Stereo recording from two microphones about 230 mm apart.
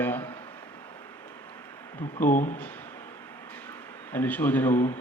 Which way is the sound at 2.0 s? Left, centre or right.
Left.